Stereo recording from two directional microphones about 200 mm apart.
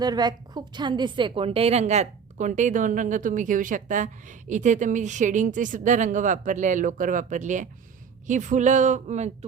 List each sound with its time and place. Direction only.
0.0 s a woman's voice: 20° right (ahead or behind)